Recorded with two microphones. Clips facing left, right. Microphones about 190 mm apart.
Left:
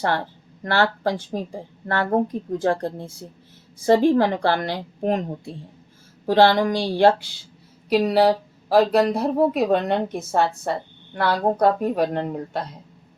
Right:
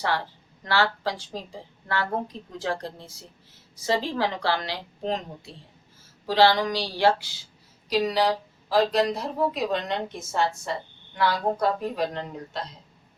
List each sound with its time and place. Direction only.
0.6 s a woman's voice: 55° left (ahead or behind)